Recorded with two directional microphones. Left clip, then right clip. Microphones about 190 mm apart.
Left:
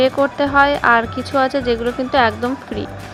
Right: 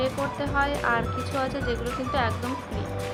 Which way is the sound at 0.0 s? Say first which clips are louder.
Left 12 dB; 40° left (ahead or behind).